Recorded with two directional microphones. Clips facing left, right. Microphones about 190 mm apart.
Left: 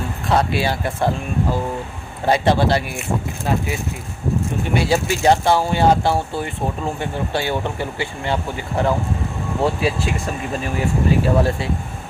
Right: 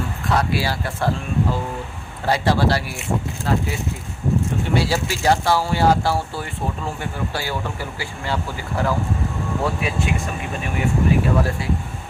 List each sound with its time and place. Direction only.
0.3 s speech: 25° left (ahead or behind)
2.2 s speech: 20° left (ahead or behind)
4.7 s speech: 20° left (ahead or behind)
9.6 s speech: 30° left (ahead or behind)